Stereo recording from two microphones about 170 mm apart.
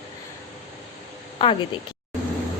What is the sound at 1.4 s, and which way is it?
Speech, 30° left (ahead or behind).